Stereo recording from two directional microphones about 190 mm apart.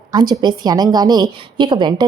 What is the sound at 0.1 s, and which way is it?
A woman's voice, 20° right (ahead or behind).